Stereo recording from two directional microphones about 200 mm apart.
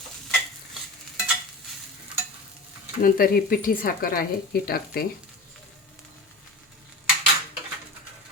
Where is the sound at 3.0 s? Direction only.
45° left (ahead or behind).